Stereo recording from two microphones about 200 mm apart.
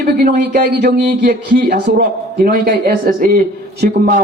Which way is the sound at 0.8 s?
55° right (ahead or behind).